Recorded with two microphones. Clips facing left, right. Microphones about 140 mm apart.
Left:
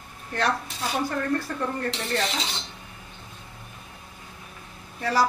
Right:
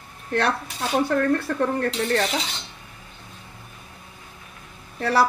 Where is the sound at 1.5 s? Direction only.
75° right (ahead or behind).